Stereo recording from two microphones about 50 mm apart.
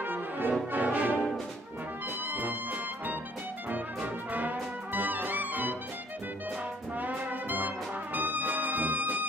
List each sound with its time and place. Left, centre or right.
0.0 s brass instrument: right
2.3 s music: right
3.7 s brass instrument: right
7.0 s brass instrument: right